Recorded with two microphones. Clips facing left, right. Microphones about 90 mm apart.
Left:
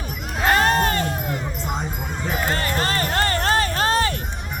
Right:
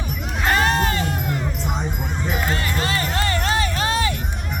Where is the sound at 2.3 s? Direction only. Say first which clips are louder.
Left 2 dB; 40° left (ahead or behind).